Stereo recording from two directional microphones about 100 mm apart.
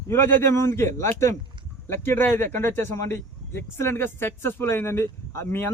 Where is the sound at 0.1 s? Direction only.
25° left (ahead or behind).